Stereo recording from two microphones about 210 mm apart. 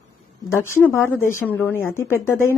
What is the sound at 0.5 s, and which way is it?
A woman's voice, 10° left (ahead or behind).